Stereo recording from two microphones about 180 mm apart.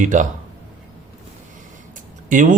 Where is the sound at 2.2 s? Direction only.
45° right (ahead or behind).